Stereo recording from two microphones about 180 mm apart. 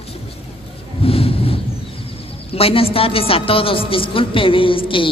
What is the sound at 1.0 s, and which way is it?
Speech, 30° left (ahead or behind).